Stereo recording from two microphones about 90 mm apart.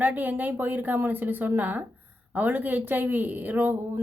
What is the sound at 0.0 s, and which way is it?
Speech, 20° right (ahead or behind).